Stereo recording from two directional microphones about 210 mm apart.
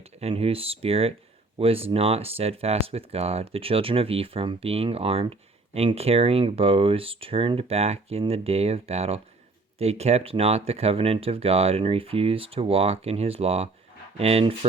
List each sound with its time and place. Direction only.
0.2 s speech: 30° right (ahead or behind)